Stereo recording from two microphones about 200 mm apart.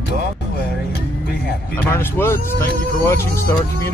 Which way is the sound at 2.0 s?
10° left (ahead or behind).